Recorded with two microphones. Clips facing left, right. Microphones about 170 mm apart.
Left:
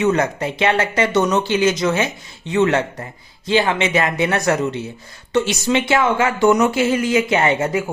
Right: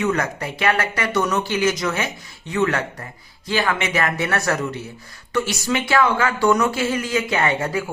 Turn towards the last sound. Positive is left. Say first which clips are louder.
# left 4 dB
turn(degrees=20)  # may be behind; listen again after turning